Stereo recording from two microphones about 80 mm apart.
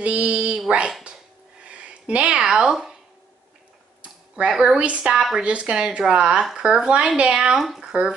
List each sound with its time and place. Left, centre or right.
0.0 s speech: centre
1.0 s a sound: centre
4.0 s speech: centre